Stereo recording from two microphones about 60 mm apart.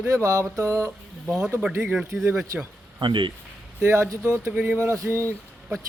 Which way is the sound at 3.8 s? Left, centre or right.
Right.